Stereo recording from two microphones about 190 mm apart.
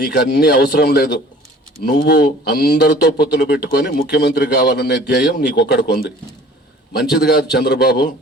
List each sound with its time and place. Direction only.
0.0 s speech: 55° left (ahead or behind)